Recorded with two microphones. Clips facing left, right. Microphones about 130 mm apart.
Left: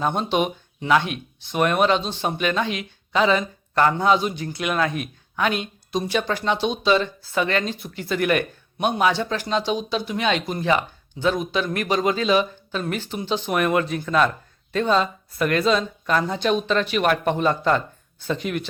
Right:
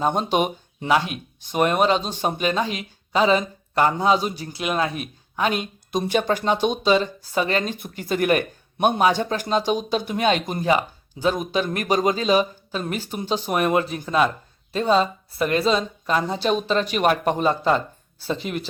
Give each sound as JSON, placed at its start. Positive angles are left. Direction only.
{"t": 0.0, "sound": "speech", "side_deg": -40}